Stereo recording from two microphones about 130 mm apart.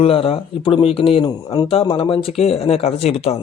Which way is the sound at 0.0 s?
45° left (ahead or behind).